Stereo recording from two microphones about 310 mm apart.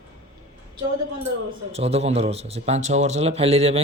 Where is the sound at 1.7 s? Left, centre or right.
Centre.